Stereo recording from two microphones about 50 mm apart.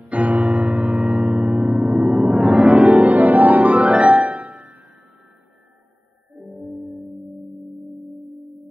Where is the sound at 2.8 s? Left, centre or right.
Right.